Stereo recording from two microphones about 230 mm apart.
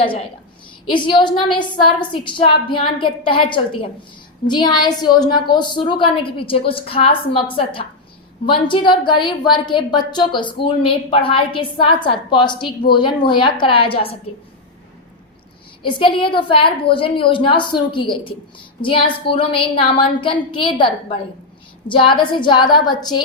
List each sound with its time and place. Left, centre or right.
0.9 s a woman's voice: left
15.8 s a woman's voice: left